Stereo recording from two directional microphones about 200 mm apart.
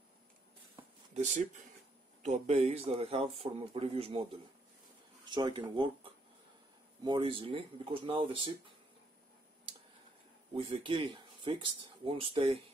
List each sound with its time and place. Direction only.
1.1 s a man's voice: 35° right (ahead or behind)
5.3 s a man's voice: 25° right (ahead or behind)
10.5 s speech: 25° right (ahead or behind)